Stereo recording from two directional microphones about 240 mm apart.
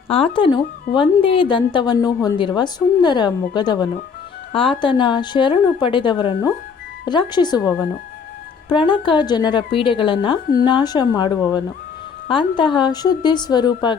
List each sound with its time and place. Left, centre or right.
0.1 s a woman's voice: left
8.7 s a woman's voice: left